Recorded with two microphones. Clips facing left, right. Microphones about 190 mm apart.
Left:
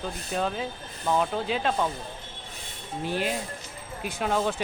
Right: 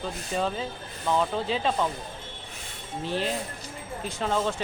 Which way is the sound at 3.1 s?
10° left (ahead or behind).